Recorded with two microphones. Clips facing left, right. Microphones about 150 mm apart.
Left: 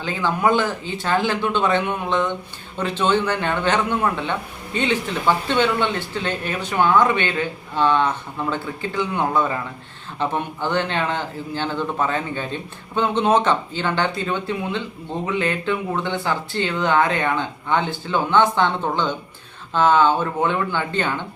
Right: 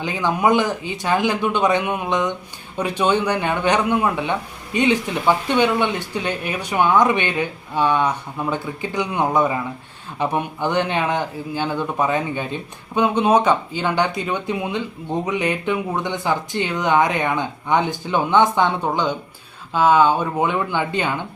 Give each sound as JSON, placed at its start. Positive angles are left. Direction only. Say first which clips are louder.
{"t": 0.0, "sound": "speech", "louder": "right 1 dB", "side_deg": -15}